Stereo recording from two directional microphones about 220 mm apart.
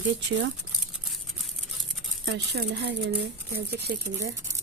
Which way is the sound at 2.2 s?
50° right (ahead or behind).